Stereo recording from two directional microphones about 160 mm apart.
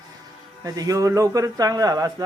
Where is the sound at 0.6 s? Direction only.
25° right (ahead or behind).